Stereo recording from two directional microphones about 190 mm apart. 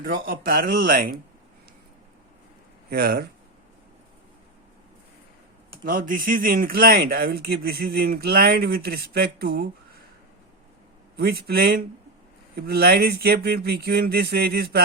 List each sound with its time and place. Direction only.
0.0 s speech: 50° right (ahead or behind)
2.9 s speech: 55° right (ahead or behind)
5.8 s speech: 45° right (ahead or behind)
11.2 s speech: 55° right (ahead or behind)